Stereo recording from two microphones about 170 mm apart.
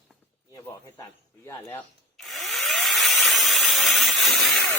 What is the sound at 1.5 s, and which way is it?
Speech, 15° left (ahead or behind).